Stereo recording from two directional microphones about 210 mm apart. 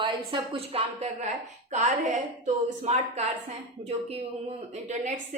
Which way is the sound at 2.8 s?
30° right (ahead or behind).